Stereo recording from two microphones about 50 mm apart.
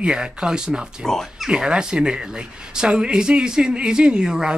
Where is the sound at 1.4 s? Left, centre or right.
Centre.